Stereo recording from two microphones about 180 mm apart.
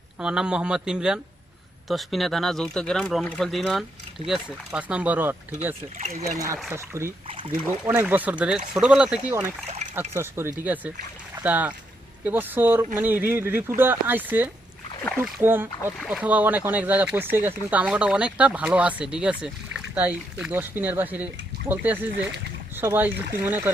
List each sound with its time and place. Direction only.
0.2 s speech: 5° right (ahead or behind)
6.0 s speech: 40° right (ahead or behind)
6.7 s speech: 15° right (ahead or behind)
7.3 s speech: 30° right (ahead or behind)
7.9 s speech: 10° right (ahead or behind)